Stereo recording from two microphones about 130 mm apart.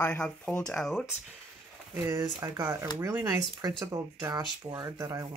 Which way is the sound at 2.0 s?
25° right (ahead or behind).